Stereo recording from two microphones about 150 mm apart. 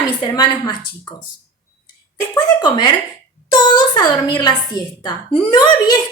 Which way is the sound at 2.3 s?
30° left (ahead or behind).